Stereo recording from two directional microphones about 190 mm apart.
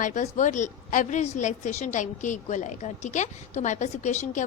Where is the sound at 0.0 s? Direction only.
40° left (ahead or behind).